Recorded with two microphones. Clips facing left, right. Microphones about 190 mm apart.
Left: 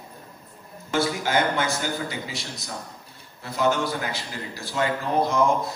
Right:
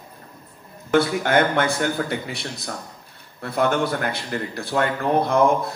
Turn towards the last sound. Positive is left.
turn(degrees=-60)  # may be behind; listen again after turning